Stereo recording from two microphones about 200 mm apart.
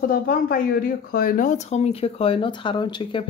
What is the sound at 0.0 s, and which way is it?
Speech, 45° left (ahead or behind).